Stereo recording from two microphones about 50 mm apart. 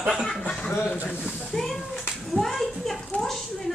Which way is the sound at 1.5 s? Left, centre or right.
Centre.